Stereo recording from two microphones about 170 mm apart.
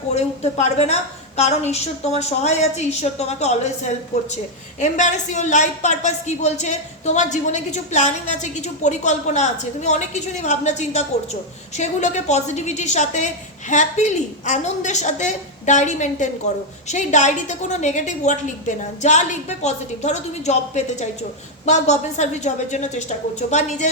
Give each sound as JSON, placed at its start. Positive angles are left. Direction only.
{"t": 0.1, "sound": "a woman's voice", "side_deg": 40}